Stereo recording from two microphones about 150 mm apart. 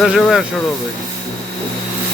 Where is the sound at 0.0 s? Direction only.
Centre (ahead or behind).